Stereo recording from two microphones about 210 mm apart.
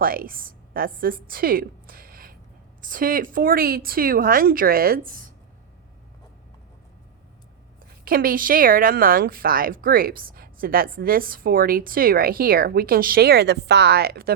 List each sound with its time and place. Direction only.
0.0 s a woman's voice: 45° right (ahead or behind)
8.0 s a woman's voice: 45° right (ahead or behind)